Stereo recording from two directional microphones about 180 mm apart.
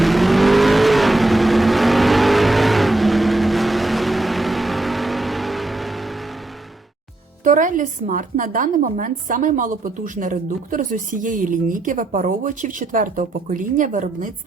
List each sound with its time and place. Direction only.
0.0 s vehicle: centre (ahead or behind)
7.4 s a woman's voice: 45° right (ahead or behind)